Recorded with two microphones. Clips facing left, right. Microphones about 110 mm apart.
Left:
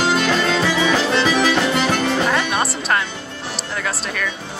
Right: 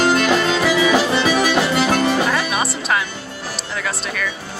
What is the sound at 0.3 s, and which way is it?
Music, 10° right (ahead or behind).